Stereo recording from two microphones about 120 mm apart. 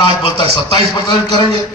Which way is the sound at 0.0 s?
45° left (ahead or behind).